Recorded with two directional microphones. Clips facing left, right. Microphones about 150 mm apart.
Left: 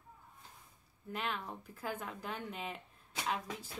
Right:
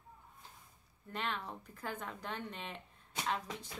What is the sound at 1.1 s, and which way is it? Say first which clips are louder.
A woman's voice: even; 5° left (ahead or behind).